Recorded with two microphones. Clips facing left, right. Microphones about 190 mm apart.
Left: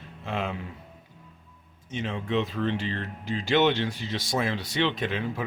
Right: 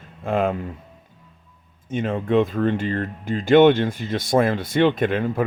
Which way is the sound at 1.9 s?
50° right (ahead or behind).